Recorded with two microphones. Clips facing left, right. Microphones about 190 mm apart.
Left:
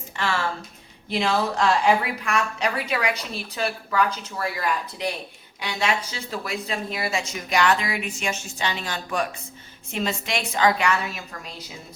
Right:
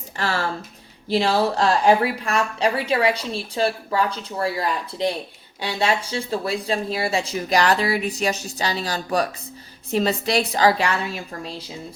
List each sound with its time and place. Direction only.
0.2 s a woman's voice: 40° right (ahead or behind)